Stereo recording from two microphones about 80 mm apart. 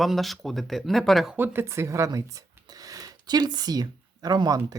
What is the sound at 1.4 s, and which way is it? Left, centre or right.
Speech, right.